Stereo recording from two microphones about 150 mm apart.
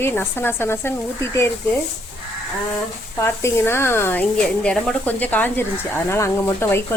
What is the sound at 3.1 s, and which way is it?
Speech, 15° left (ahead or behind).